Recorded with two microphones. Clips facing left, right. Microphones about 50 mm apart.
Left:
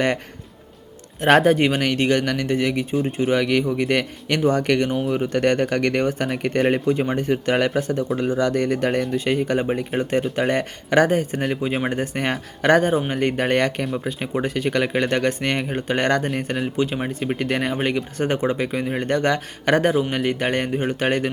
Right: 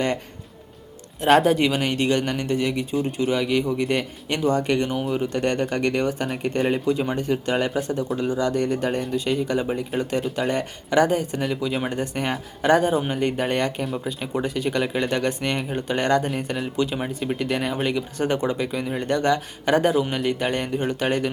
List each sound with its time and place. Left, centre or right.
1.2 s speech: left
6.7 s speech: left
7.3 s speech: left
16.7 s speech: left
17.3 s speech: left
20.7 s speech: left